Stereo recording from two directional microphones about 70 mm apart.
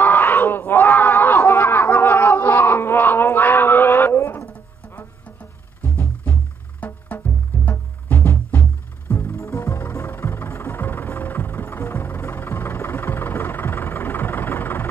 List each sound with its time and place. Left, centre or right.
0.0 s a sound: left
5.8 s music: left
9.1 s music: left